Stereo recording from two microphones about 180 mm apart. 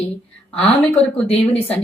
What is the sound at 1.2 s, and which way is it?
Speech, 35° left (ahead or behind).